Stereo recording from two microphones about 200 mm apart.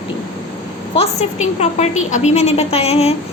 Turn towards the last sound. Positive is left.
turn(degrees=30)  # may be behind; listen again after turning